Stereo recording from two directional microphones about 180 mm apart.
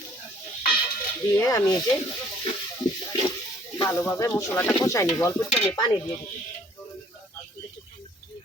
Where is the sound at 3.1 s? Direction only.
20° left (ahead or behind).